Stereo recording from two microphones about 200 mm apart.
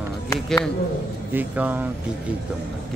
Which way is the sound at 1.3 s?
10° right (ahead or behind).